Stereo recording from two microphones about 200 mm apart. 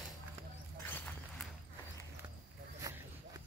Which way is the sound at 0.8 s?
10° left (ahead or behind).